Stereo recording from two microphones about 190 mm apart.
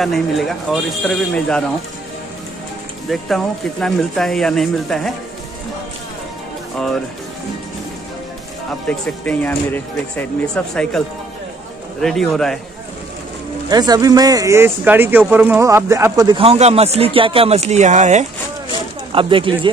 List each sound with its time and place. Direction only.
0.0 s speech: centre (ahead or behind)
3.1 s speech: centre (ahead or behind)
8.8 s speech: 5° left (ahead or behind)
13.7 s speech: 20° right (ahead or behind); by 18.2 s 40° right (ahead or behind)
19.1 s speech: 25° right (ahead or behind)